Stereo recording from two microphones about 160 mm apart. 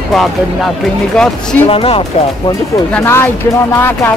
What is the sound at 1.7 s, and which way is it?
Speech, 35° left (ahead or behind).